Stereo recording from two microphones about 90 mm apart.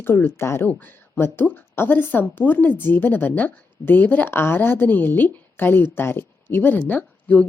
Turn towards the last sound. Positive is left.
turn(degrees=15)  # may be behind; listen again after turning